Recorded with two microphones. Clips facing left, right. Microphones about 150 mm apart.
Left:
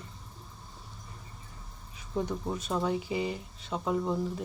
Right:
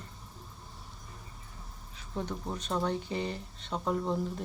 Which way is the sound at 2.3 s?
5° left (ahead or behind).